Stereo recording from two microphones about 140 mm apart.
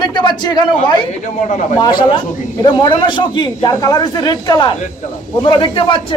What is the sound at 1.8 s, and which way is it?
A woman's voice, 30° left (ahead or behind).